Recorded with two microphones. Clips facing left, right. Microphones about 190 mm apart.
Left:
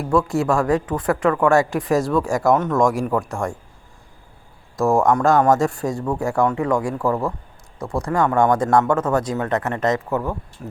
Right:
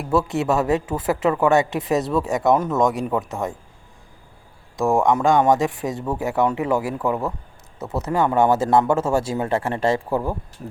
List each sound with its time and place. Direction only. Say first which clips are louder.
0.1 s speech: left 1 dB; 5° right (ahead or behind)
0.5 s speech: even; 25° right (ahead or behind)
2.0 s speech: left 2 dB; centre (ahead or behind)
4.8 s speech: left 1 dB; centre (ahead or behind)
6.5 s speech: left 1 dB; 20° right (ahead or behind)
6.7 s speech: left 1 dB; 5° right (ahead or behind)
8.3 s speech: even; 25° right (ahead or behind)